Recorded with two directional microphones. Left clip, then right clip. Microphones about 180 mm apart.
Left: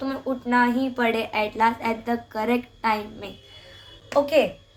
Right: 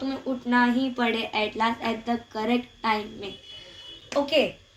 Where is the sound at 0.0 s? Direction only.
15° left (ahead or behind).